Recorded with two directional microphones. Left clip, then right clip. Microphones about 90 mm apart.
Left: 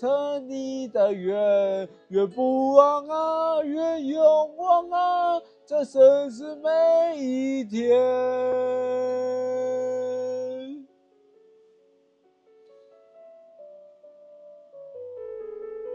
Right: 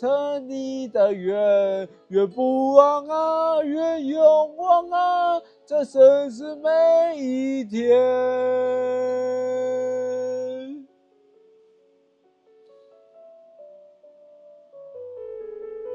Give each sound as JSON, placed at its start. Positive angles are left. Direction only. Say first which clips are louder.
{"t": 0.0, "sound": "female singing", "louder": "right 2 dB", "side_deg": -40}
{"t": 2.9, "sound": "female singing", "louder": "right 3 dB", "side_deg": -35}
{"t": 6.4, "sound": "female singing", "louder": "right 3 dB", "side_deg": -35}
{"t": 10.0, "sound": "a sound", "louder": "right 2 dB", "side_deg": -35}
{"t": 15.0, "sound": "music", "louder": "right 1 dB", "side_deg": -50}